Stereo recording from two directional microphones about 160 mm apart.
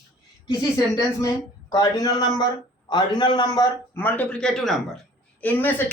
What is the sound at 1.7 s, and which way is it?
A man's voice, 25° left (ahead or behind).